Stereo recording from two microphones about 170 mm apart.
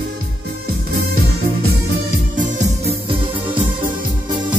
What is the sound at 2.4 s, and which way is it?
Music, 45° right (ahead or behind).